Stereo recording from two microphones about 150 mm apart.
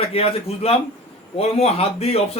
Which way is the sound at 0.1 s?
40° left (ahead or behind).